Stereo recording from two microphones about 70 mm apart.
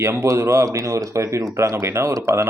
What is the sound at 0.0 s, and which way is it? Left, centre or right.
Speech, right.